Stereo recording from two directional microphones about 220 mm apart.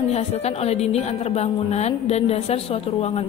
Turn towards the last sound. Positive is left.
turn(degrees=25)  # may be behind; listen again after turning